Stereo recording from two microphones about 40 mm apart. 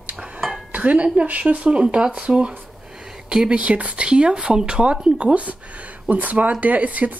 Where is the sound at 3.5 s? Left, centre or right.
Right.